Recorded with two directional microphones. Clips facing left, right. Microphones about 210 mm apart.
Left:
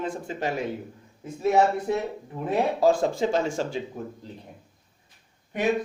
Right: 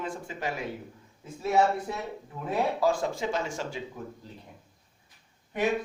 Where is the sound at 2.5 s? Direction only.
30° left (ahead or behind).